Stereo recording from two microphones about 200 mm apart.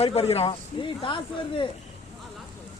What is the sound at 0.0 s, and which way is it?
Speech, 30° left (ahead or behind).